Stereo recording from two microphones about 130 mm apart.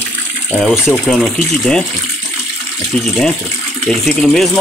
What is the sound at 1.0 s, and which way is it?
Speech, 5° left (ahead or behind).